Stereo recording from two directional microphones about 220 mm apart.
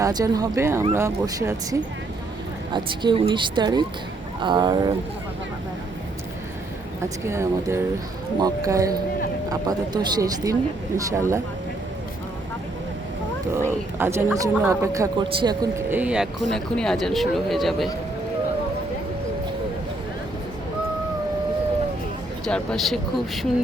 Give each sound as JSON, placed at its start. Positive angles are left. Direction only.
{"t": 0.0, "sound": "speech", "side_deg": -15}
{"t": 2.7, "sound": "a woman's voice", "side_deg": -20}
{"t": 7.0, "sound": "speech", "side_deg": -10}
{"t": 13.7, "sound": "speech", "side_deg": -10}
{"t": 22.4, "sound": "speech", "side_deg": 5}